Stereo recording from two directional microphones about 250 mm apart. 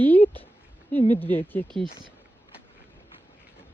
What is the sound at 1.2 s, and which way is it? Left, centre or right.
Speech, centre.